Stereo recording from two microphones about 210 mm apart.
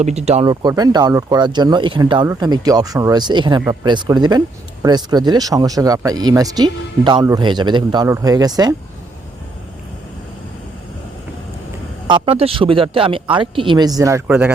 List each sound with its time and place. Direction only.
0.0 s speech: 30° right (ahead or behind)
12.0 s speech: 25° right (ahead or behind); by 14.5 s 10° right (ahead or behind)